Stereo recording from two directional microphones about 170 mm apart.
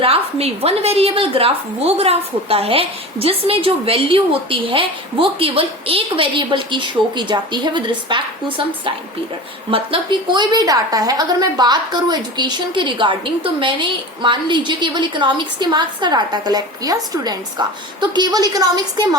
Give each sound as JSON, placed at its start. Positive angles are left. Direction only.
{"t": 0.0, "sound": "a woman's voice", "side_deg": -35}